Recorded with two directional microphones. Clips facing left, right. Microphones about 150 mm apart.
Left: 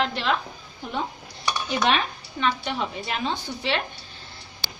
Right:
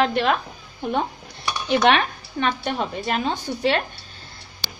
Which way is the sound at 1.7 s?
65° right (ahead or behind).